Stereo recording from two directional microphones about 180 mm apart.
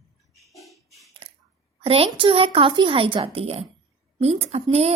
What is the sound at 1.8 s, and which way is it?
A woman's voice, 30° right (ahead or behind).